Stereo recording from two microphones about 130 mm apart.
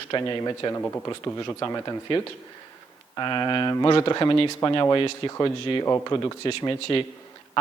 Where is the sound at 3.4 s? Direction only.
35° left (ahead or behind).